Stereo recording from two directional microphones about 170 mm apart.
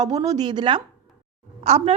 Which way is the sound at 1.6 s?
40° right (ahead or behind).